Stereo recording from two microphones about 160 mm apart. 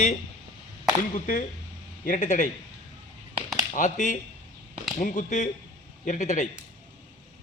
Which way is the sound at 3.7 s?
50° left (ahead or behind).